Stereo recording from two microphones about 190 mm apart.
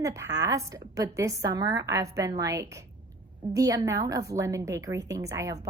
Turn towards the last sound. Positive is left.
turn(degrees=-15)  # may be behind; listen again after turning